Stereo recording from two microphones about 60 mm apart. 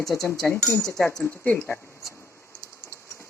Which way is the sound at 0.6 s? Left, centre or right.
Left.